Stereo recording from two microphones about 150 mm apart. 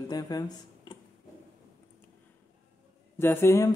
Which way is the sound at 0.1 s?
25° left (ahead or behind).